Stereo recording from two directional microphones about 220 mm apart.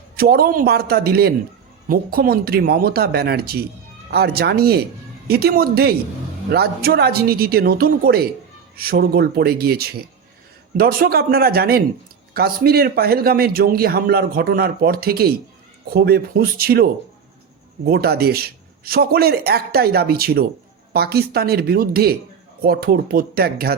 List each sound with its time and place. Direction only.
0.2 s a man's voice: 45° right (ahead or behind)